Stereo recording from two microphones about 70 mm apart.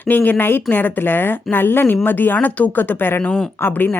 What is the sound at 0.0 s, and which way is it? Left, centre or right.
Speech, left.